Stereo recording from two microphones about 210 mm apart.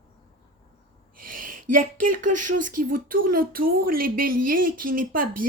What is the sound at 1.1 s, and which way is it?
Speech, 40° right (ahead or behind).